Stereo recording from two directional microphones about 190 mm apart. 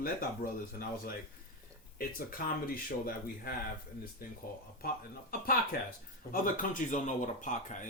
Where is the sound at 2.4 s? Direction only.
50° left (ahead or behind).